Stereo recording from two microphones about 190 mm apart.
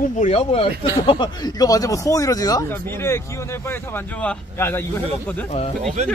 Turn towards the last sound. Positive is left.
turn(degrees=-35)  # may be behind; listen again after turning